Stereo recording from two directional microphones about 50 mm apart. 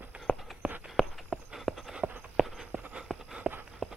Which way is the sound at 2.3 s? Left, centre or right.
Centre.